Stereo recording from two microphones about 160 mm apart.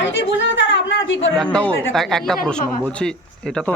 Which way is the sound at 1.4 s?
5° left (ahead or behind).